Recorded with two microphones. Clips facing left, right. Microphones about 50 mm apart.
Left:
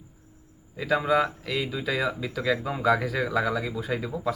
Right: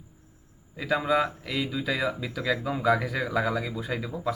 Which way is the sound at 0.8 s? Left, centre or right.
Centre.